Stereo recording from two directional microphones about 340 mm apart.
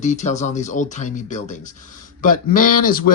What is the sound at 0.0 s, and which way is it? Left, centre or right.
Speech, left.